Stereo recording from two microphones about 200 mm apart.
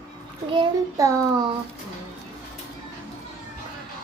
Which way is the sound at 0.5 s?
15° right (ahead or behind).